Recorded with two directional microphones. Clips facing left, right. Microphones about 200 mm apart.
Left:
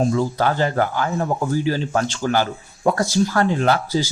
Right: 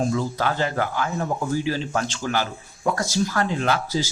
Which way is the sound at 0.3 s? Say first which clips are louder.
Left 4 dB; 40° left (ahead or behind).